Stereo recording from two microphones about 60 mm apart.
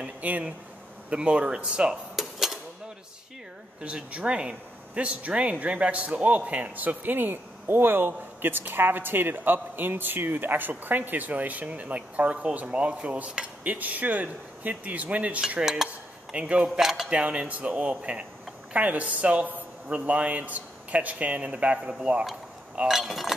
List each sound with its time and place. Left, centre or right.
0.0 s a sound: right
1.1 s speech: centre
2.1 s typewriter: centre
3.8 s speech: centre
15.6 s cutlery: centre
16.3 s speech: right
16.6 s speech: centre
17.1 s speech: right
22.8 s speech: centre